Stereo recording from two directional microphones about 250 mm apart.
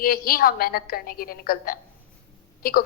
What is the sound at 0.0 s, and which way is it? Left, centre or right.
A woman's voice, left.